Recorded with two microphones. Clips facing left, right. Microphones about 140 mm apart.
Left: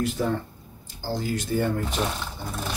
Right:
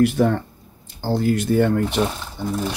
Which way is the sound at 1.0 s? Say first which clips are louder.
Right 9 dB; 60° right (ahead or behind).